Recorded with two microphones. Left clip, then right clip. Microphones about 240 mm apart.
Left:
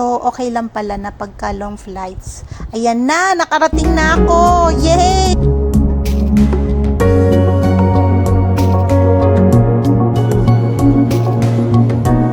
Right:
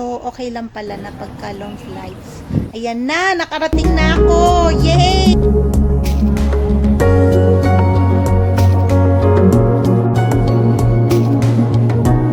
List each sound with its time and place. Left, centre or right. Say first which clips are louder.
0.0 s speech: left 7 dB; centre
2.8 s music: left 4 dB; left
5.4 s music: right 1 dB; centre